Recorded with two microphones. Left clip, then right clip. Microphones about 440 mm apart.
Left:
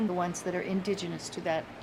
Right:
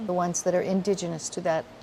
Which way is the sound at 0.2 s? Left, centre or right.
Right.